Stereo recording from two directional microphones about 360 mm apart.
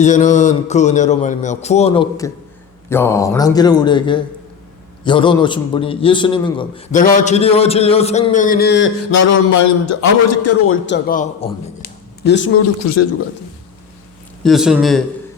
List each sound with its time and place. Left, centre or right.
0.0 s a man's voice: centre
9.1 s a man's voice: left; by 11.9 s centre
12.2 s a man's voice: left
12.8 s a man's voice: left
14.4 s speech: centre